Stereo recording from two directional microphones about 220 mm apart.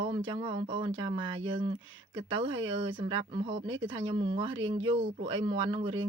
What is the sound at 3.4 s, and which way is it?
Speech, 25° right (ahead or behind).